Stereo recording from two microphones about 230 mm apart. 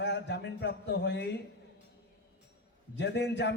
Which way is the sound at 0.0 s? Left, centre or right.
Left.